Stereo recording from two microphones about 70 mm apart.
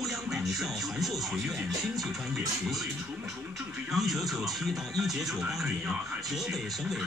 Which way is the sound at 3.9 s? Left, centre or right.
Centre.